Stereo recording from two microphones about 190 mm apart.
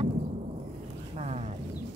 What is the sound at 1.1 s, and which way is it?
Speech, 35° right (ahead or behind).